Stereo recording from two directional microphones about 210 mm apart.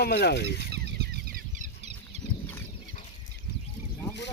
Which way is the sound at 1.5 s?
35° right (ahead or behind).